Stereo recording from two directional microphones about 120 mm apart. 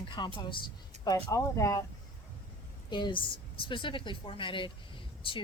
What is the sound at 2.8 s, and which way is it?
A woman's voice, 40° left (ahead or behind).